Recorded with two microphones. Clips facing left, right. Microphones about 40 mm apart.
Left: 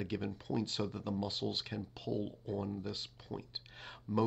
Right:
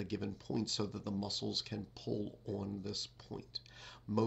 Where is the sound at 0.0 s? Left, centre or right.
Left.